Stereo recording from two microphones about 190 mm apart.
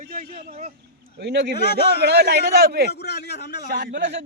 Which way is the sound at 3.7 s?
65° right (ahead or behind).